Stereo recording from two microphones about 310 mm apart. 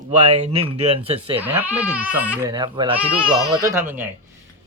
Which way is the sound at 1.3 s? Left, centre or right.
Centre.